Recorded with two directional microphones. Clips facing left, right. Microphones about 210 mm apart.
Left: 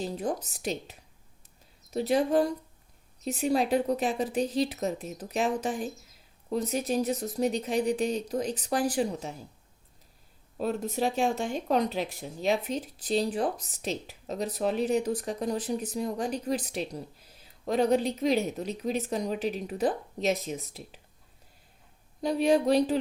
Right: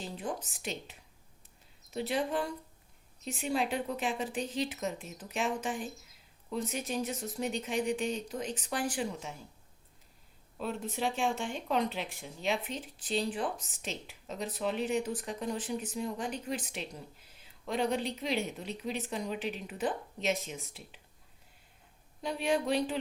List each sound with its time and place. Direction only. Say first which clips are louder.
0.0 s speech: left 7 dB; 40° left (ahead or behind)
10.6 s speech: left 6 dB; 40° left (ahead or behind)
22.2 s speech: left 7 dB; 40° left (ahead or behind)